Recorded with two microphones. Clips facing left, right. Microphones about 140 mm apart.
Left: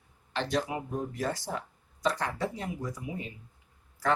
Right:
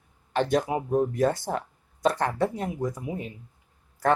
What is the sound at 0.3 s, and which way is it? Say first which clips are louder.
Speech: right 6 dB; 50° right (ahead or behind).